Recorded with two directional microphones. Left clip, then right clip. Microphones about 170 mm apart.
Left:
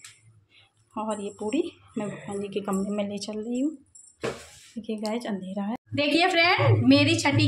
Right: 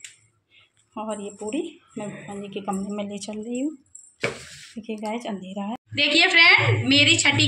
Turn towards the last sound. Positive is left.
turn(degrees=50)  # may be behind; listen again after turning